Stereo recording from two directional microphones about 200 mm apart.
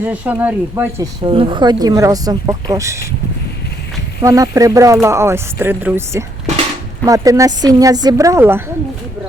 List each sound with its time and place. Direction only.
0.0 s speech: 10° right (ahead or behind)
1.2 s a woman's voice: 25° right (ahead or behind)
4.2 s speech: 15° right (ahead or behind)